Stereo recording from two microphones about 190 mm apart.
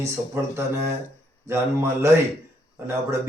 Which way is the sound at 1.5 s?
15° right (ahead or behind).